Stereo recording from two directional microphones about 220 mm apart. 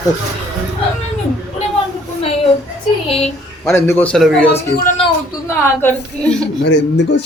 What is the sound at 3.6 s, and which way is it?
A woman's voice, 10° left (ahead or behind).